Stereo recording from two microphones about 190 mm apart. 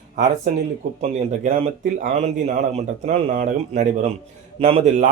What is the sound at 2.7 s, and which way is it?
Speech, 35° right (ahead or behind).